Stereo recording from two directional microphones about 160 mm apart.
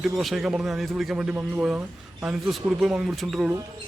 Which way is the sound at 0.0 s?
Centre (ahead or behind).